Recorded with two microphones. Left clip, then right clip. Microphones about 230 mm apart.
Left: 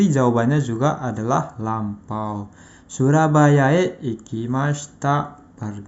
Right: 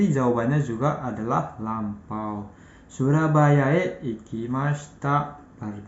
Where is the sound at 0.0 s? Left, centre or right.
Left.